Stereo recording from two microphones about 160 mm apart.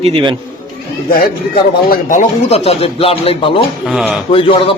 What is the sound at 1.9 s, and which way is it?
Speech, 55° left (ahead or behind).